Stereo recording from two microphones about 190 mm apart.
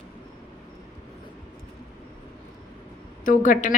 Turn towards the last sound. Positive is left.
turn(degrees=45)  # may be behind; listen again after turning